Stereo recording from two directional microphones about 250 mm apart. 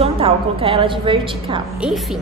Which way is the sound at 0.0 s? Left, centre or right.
Right.